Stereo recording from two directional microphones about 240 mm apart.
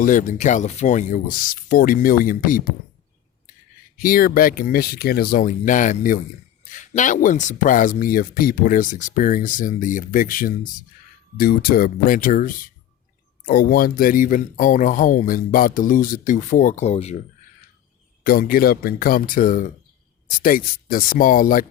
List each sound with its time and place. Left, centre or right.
0.0 s speech: left
3.9 s speech: left
18.2 s speech: left